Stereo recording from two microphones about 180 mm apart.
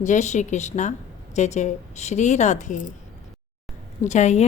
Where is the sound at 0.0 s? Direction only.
40° left (ahead or behind).